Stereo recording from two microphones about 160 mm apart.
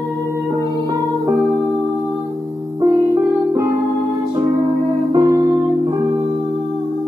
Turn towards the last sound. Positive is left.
turn(degrees=-30)  # may be behind; listen again after turning